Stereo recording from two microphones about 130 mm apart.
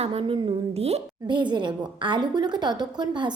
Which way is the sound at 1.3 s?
35° right (ahead or behind).